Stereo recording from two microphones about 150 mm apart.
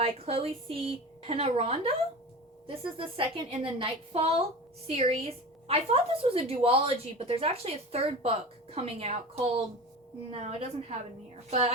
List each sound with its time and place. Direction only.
0.0 s a woman's voice: 40° right (ahead or behind)